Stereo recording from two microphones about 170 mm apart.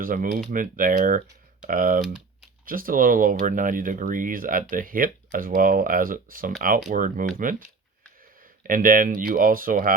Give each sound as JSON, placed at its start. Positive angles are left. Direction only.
{"t": 0.0, "sound": "speech", "side_deg": -55}